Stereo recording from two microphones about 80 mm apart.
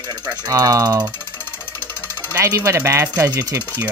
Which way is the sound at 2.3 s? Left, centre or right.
Right.